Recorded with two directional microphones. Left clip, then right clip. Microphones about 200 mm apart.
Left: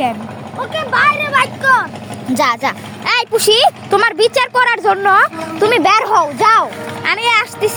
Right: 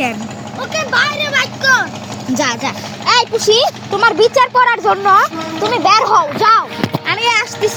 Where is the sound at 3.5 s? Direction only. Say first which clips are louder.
Left 2 dB; 40° left (ahead or behind); by 6.1 s 60° left (ahead or behind).